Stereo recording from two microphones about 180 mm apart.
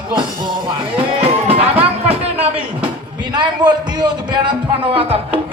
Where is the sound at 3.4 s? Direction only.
25° right (ahead or behind).